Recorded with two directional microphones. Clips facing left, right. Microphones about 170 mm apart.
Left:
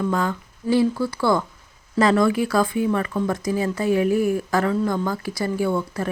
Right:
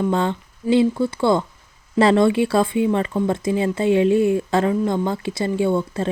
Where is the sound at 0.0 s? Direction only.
25° right (ahead or behind).